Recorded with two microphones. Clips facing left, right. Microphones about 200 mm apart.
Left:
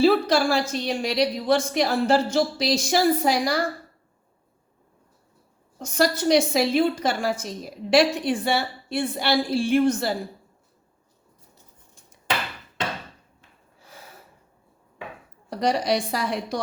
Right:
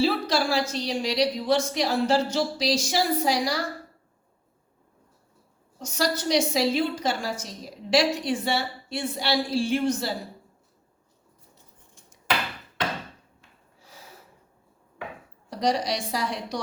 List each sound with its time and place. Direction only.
0.0 s a woman's voice: 55° left (ahead or behind)
5.8 s a woman's voice: 55° left (ahead or behind)
15.4 s a woman's voice: 55° left (ahead or behind)